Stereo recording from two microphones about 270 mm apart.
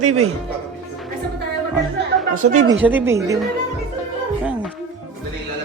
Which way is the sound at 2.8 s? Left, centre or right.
Centre.